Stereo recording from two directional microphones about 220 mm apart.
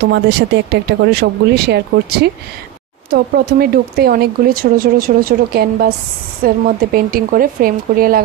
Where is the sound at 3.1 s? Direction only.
45° right (ahead or behind).